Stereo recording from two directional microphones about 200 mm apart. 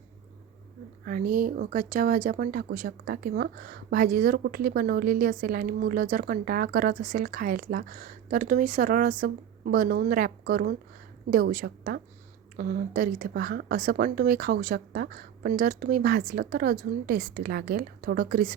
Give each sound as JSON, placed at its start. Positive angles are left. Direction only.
{"t": 1.0, "sound": "speech", "side_deg": -45}